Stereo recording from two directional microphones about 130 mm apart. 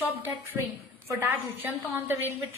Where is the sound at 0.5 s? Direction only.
10° right (ahead or behind).